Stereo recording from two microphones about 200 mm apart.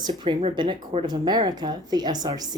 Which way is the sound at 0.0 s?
20° right (ahead or behind).